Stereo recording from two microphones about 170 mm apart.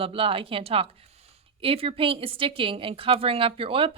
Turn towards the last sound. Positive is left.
turn(degrees=-35)  # may be behind; listen again after turning